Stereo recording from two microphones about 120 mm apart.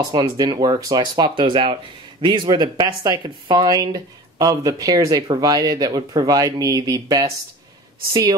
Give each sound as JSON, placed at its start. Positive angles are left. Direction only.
{"t": 0.0, "sound": "speech", "side_deg": -30}